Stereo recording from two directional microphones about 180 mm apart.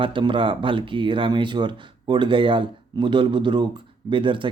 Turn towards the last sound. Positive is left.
turn(degrees=-30)  # may be behind; listen again after turning